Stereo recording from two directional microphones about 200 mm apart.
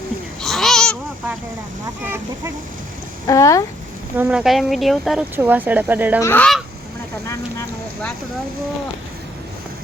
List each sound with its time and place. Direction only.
0.4 s babbling: centre (ahead or behind)
2.0 s speech: 10° right (ahead or behind)
3.2 s goose: 15° left (ahead or behind)
4.2 s speech: 5° right (ahead or behind)
6.1 s goose: 10° left (ahead or behind)